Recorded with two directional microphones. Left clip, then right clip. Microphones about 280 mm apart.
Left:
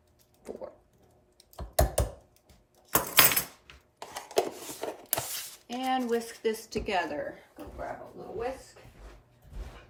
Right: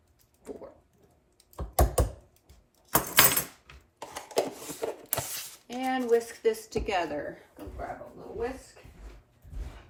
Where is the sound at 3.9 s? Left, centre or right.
Centre.